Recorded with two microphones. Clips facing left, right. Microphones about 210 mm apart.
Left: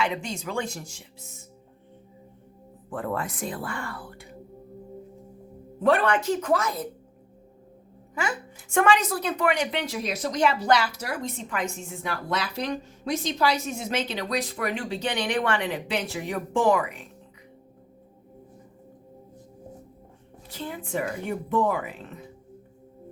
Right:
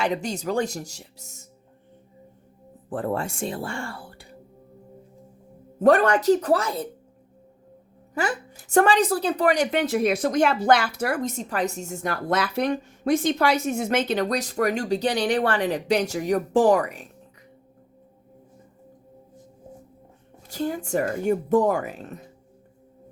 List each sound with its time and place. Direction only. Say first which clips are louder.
0.0 s speech: right 3 dB; 40° right (ahead or behind)
2.9 s speech: right 3 dB; 30° right (ahead or behind)
5.8 s speech: right 5 dB; 40° right (ahead or behind)
8.1 s a woman's voice: right 4 dB; 40° right (ahead or behind)
20.5 s a woman's voice: right 6 dB; 45° right (ahead or behind)